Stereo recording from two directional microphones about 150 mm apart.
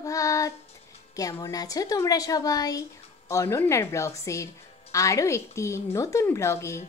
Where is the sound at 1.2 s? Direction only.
25° left (ahead or behind).